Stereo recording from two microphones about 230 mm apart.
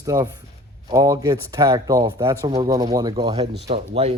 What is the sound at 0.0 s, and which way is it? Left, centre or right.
Speech, centre.